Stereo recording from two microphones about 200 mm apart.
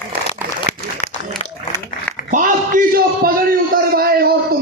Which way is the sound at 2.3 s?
40° right (ahead or behind).